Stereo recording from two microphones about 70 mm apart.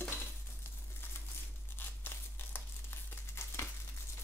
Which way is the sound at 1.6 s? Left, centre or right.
Left.